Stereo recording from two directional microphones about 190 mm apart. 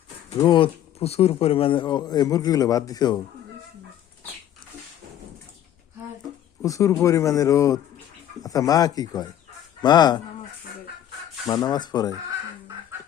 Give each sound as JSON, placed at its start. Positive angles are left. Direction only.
{"t": 0.3, "sound": "speech", "side_deg": 25}
{"t": 6.6, "sound": "speech", "side_deg": 15}
{"t": 11.4, "sound": "speech", "side_deg": 20}